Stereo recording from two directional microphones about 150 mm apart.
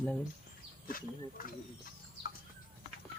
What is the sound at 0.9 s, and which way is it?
Speech, 75° left (ahead or behind).